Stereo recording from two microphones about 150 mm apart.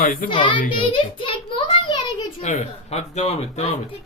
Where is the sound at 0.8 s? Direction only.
35° left (ahead or behind).